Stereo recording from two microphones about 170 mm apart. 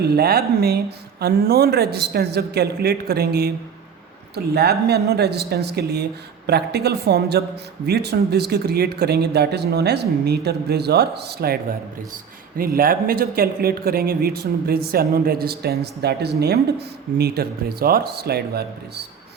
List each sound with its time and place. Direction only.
0.0 s speech: 70° right (ahead or behind)
4.5 s speech: 70° right (ahead or behind)